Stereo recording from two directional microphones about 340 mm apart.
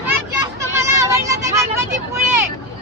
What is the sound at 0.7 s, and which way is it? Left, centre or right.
Speech, centre.